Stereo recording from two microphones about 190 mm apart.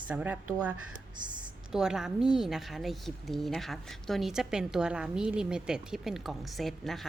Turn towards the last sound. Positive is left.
turn(degrees=0)  # may be behind; listen again after turning